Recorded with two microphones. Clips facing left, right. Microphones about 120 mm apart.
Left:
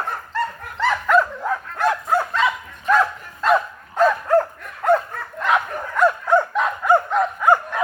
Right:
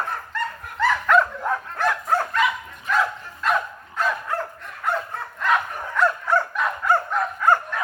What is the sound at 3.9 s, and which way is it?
Dog, 40° left (ahead or behind).